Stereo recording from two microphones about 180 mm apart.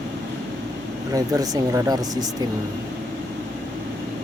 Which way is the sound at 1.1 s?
20° right (ahead or behind).